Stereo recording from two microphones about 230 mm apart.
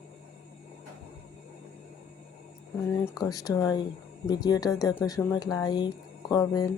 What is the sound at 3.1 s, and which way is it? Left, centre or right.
Speech, centre.